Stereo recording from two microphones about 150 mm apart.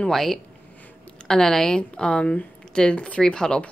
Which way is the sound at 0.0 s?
Centre (ahead or behind).